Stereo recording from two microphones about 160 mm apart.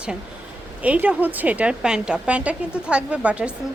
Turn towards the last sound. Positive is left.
turn(degrees=-5)  # may be behind; listen again after turning